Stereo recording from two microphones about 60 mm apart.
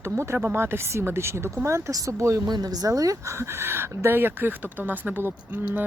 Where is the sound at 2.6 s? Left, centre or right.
Right.